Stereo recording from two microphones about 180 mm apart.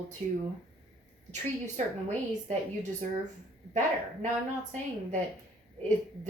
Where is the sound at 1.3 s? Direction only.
40° right (ahead or behind).